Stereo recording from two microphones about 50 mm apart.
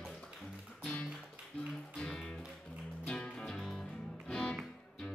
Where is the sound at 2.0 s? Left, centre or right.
Centre.